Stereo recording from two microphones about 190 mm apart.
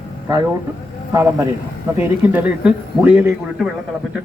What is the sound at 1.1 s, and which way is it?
Speech, 15° right (ahead or behind).